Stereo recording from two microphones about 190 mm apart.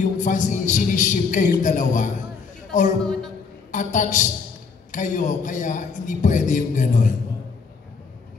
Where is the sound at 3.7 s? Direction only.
40° left (ahead or behind).